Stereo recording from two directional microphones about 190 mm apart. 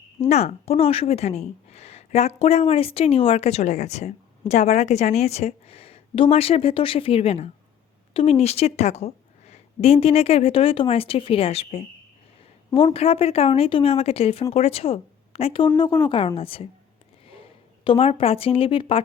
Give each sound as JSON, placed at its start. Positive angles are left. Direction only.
{"t": 0.2, "sound": "a woman's voice", "side_deg": 35}
{"t": 17.8, "sound": "a woman's voice", "side_deg": 30}